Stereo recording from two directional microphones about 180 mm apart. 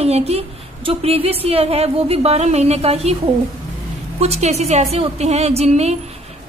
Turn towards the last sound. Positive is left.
turn(degrees=-35)  # may be behind; listen again after turning